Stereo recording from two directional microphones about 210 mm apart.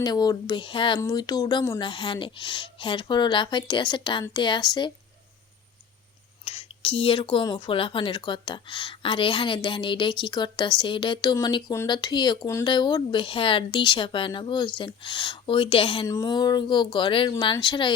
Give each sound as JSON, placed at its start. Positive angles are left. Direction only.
{"t": 0.0, "sound": "speech", "side_deg": 20}
{"t": 6.4, "sound": "speech", "side_deg": 30}